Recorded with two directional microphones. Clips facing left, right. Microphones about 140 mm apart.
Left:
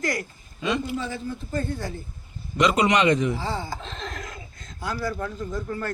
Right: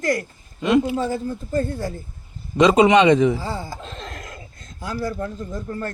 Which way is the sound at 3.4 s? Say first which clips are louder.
Right 1 dB; 40° right (ahead or behind).